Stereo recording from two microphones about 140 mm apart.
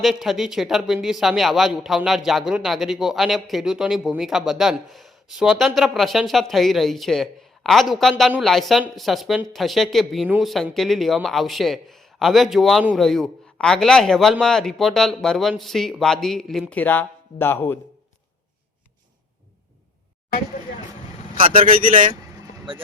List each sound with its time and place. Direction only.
0.0 s speech: centre (ahead or behind); by 17.7 s 15° left (ahead or behind)
21.8 s a man's voice: 70° right (ahead or behind)